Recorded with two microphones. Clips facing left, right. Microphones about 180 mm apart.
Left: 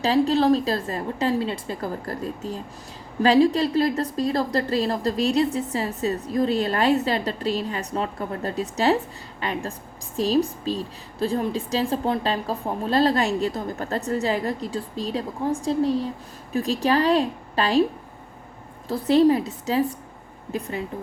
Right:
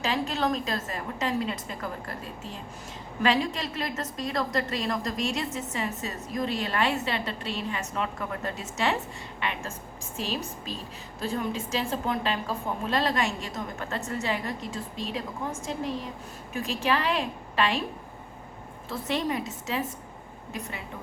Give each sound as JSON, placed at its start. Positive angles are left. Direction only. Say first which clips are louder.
{"t": 0.0, "sound": "a woman's voice", "louder": "left 9 dB", "side_deg": 35}
{"t": 18.9, "sound": "a woman's voice", "louder": "left 12 dB", "side_deg": 35}